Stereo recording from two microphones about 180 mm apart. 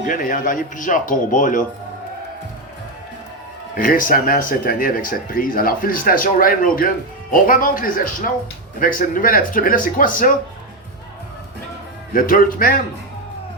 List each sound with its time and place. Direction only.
0.0 s speech: 50° left (ahead or behind)
3.8 s speech: 50° left (ahead or behind)
12.1 s speech: 50° left (ahead or behind)